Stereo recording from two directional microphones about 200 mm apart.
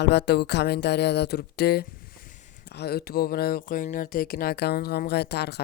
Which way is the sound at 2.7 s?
55° left (ahead or behind).